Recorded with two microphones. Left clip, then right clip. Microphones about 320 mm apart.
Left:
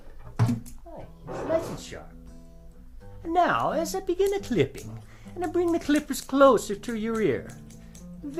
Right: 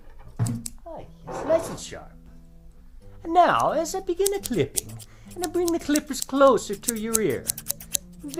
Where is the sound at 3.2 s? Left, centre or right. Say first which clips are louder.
Right 4 dB; centre.